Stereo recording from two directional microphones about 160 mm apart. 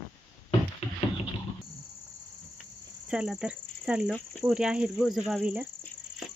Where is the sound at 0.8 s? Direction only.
40° left (ahead or behind).